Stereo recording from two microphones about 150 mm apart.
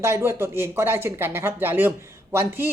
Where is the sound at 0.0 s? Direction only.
15° right (ahead or behind).